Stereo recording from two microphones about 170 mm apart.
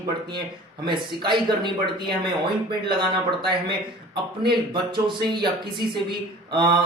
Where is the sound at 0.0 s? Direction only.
25° right (ahead or behind).